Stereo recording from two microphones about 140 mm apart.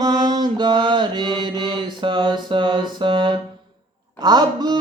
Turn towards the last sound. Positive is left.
turn(degrees=-30)  # may be behind; listen again after turning